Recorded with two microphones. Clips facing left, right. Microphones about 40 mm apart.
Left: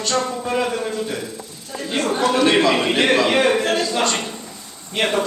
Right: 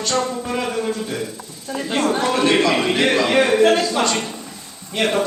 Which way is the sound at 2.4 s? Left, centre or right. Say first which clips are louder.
Right 1 dB; centre.